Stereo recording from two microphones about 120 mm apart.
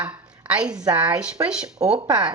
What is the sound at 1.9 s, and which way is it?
Speech, 35° right (ahead or behind).